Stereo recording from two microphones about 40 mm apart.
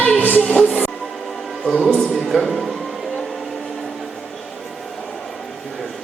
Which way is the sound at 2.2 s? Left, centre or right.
Centre.